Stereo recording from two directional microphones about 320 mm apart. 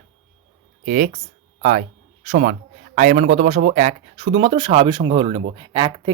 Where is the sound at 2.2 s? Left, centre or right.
Right.